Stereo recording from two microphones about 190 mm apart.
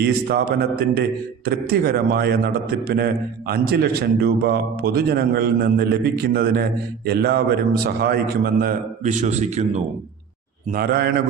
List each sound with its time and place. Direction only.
0.0 s a man's voice: 55° right (ahead or behind); by 9.6 s 35° right (ahead or behind)
10.7 s a man's voice: 55° right (ahead or behind)